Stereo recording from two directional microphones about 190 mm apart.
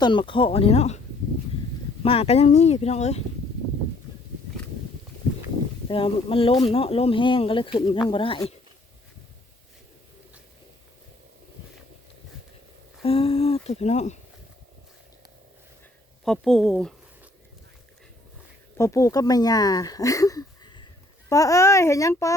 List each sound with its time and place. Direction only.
0.0 s speech: 25° left (ahead or behind)
2.0 s speech: 30° left (ahead or behind)
5.9 s speech: 30° left (ahead or behind)
13.0 s speech: 30° left (ahead or behind)
16.2 s speech: centre (ahead or behind)
18.8 s a child's voice: 15° left (ahead or behind)